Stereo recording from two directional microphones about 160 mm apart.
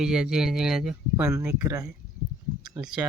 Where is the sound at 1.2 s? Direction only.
20° right (ahead or behind).